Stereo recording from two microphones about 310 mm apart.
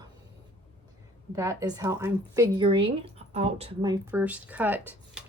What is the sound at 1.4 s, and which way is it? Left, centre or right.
Speech, centre.